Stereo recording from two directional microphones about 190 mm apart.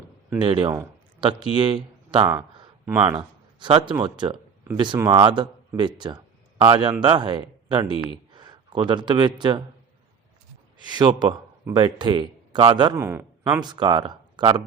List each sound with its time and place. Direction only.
0.4 s speech: 25° right (ahead or behind)
2.8 s speech: 10° right (ahead or behind)
3.1 s speech: 25° right (ahead or behind)
10.8 s a man's voice: 25° right (ahead or behind)
13.0 s speech: 10° right (ahead or behind)